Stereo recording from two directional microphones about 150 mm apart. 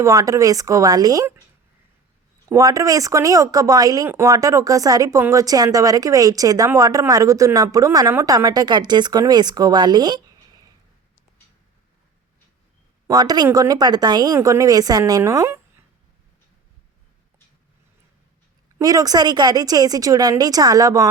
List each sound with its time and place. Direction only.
0.0 s speech: 20° right (ahead or behind)
2.5 s speech: 20° right (ahead or behind)
13.1 s speech: 25° right (ahead or behind)
18.8 s speech: 25° right (ahead or behind)